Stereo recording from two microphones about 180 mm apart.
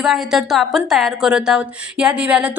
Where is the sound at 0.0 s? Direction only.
Centre (ahead or behind).